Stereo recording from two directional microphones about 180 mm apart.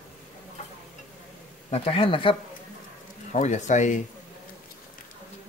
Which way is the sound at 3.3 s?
40° left (ahead or behind).